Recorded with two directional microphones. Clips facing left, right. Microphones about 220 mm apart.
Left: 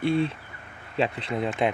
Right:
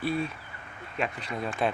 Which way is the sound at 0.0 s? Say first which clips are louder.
Left 6 dB; 25° left (ahead or behind).